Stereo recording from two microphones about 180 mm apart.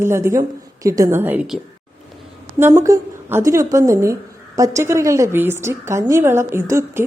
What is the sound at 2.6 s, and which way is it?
A woman's voice, 15° right (ahead or behind).